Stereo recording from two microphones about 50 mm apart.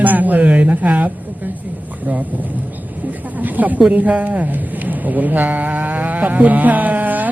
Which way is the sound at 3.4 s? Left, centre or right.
Right.